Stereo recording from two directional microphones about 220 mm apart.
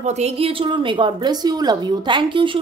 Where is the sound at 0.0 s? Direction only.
30° right (ahead or behind).